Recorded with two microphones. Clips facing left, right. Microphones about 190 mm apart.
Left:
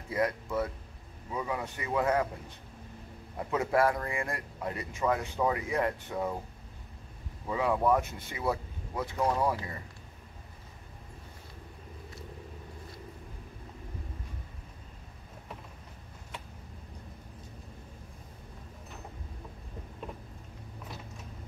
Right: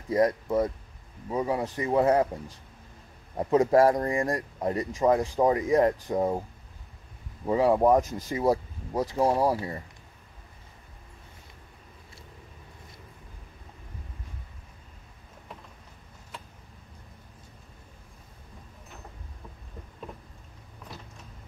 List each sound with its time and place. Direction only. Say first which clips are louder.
0.1 s speech: right 7 dB; 35° right (ahead or behind)
7.4 s speech: right 6 dB; 35° right (ahead or behind)